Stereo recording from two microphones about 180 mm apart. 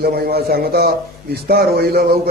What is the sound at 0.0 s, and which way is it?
A man's voice, 60° right (ahead or behind).